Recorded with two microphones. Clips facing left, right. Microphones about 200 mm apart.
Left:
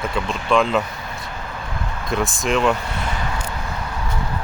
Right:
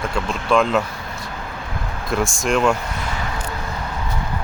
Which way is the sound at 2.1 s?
Centre (ahead or behind).